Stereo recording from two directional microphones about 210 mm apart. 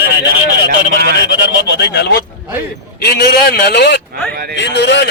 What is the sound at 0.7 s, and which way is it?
Speech, 50° right (ahead or behind).